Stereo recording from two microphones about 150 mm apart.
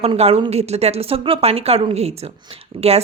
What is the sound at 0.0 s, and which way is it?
Speech, 40° right (ahead or behind).